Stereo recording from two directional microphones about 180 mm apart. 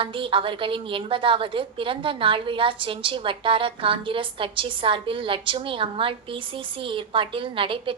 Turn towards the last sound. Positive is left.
turn(degrees=-30)  # may be behind; listen again after turning